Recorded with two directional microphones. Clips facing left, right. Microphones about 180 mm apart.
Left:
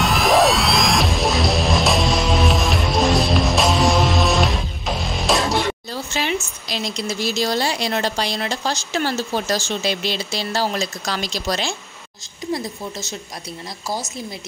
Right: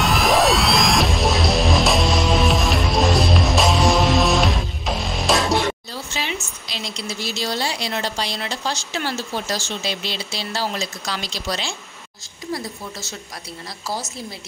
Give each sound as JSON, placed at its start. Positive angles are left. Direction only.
{"t": 0.0, "sound": "music", "side_deg": 0}
{"t": 6.1, "sound": "a woman's voice", "side_deg": 45}